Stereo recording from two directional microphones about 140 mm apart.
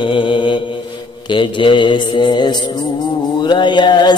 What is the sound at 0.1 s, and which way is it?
Mantra, 35° left (ahead or behind).